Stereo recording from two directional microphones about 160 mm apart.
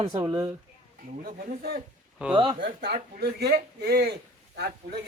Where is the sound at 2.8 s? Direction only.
80° right.